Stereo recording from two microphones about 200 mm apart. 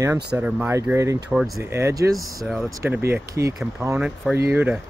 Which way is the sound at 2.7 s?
15° right (ahead or behind).